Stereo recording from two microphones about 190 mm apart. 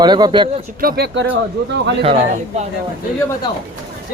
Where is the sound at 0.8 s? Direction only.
55° right (ahead or behind).